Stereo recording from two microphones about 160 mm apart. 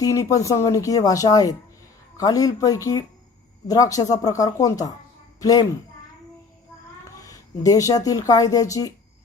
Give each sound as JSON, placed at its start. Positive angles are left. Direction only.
{"t": 0.0, "sound": "a child's voice", "side_deg": 20}
{"t": 7.2, "sound": "speech", "side_deg": 20}